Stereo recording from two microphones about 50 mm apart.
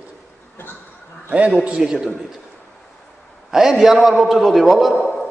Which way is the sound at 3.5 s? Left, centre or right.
Centre.